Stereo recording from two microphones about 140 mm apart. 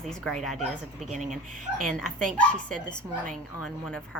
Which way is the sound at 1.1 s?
60° right (ahead or behind).